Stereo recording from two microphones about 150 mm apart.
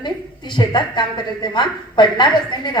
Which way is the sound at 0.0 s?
30° left (ahead or behind).